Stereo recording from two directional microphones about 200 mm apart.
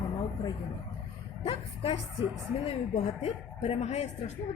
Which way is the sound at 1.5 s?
25° left (ahead or behind).